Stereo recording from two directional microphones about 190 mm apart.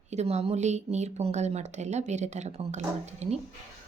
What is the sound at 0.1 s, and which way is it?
Speech, 35° right (ahead or behind).